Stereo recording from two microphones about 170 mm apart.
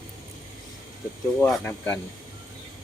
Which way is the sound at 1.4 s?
10° left (ahead or behind).